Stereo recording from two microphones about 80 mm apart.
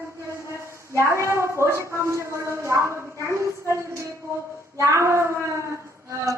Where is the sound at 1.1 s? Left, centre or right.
Right.